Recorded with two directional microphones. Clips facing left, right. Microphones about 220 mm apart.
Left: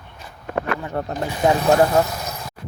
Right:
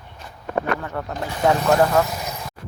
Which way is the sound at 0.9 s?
35° left (ahead or behind).